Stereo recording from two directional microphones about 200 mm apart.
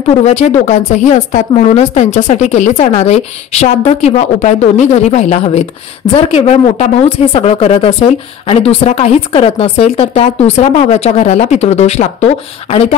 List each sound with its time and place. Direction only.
0.2 s a woman's voice: 35° left (ahead or behind)